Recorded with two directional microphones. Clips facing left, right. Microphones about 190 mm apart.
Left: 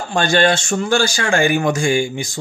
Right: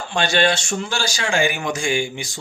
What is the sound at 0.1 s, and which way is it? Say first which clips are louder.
A man's voice: left 4 dB; 50° left (ahead or behind).